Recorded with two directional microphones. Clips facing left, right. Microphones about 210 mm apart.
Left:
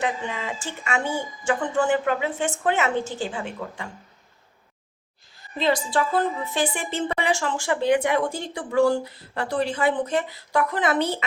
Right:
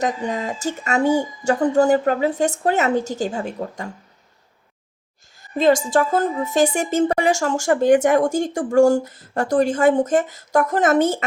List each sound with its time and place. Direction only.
0.0 s speech: 40° right (ahead or behind)
5.4 s a woman's voice: 45° right (ahead or behind)